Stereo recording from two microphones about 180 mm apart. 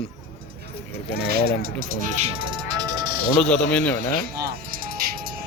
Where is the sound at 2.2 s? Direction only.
35° right (ahead or behind).